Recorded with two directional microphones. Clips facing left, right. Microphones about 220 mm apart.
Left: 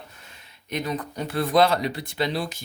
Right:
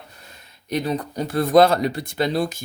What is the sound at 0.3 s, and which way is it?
Speech, 35° right (ahead or behind).